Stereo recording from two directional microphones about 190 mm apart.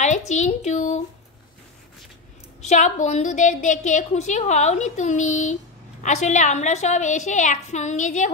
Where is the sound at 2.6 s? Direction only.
40° left (ahead or behind).